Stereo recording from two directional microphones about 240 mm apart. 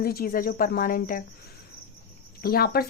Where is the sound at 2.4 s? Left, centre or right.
Left.